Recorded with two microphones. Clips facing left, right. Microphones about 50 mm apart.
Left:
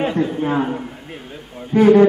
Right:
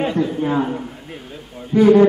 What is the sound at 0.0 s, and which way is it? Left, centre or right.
Speech, centre.